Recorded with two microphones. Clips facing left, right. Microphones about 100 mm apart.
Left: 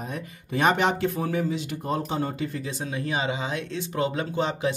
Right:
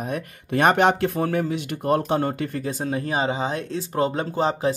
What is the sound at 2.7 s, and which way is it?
Speech, 45° right (ahead or behind).